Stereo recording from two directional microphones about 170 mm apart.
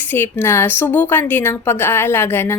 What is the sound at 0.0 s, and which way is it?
A woman's voice, 10° left (ahead or behind).